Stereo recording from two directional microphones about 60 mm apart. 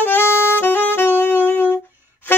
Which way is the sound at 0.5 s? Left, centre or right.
Left.